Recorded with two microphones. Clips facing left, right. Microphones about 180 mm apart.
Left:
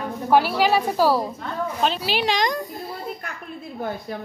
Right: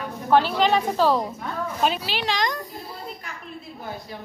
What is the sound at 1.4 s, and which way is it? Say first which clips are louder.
Speech: left 1 dB; 5° right (ahead or behind).